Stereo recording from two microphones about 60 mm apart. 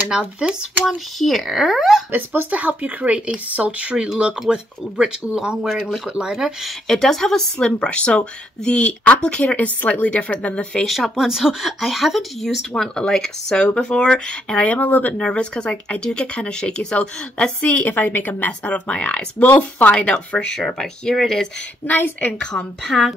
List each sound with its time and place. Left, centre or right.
0.4 s speech: centre
1.2 s speech: centre
2.0 s speech: right
2.5 s speech: right
6.9 s speech: centre
7.5 s speech: centre
10.8 s speech: centre
14.6 s speech: left
20.5 s speech: centre
21.8 s a woman's voice: left
22.4 s speech: centre
22.8 s speech: centre